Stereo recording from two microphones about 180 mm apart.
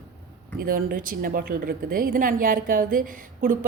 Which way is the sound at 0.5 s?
55° right (ahead or behind).